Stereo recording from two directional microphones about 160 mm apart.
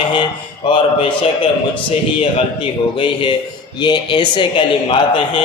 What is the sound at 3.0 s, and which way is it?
A man's voice, 30° left (ahead or behind).